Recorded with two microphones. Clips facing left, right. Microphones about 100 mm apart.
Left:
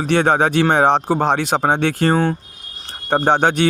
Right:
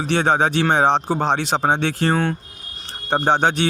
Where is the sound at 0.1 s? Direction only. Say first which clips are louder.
Left 3 dB; 50° left (ahead or behind).